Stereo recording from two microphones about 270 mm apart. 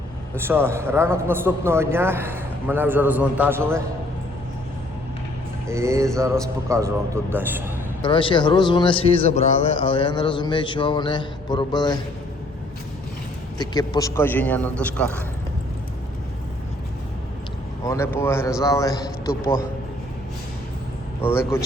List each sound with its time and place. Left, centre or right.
0.3 s a man's voice: centre
5.6 s a man's voice: centre
8.0 s a man's voice: centre
13.6 s a man's voice: centre
17.8 s a man's voice: centre
21.2 s a man's voice: centre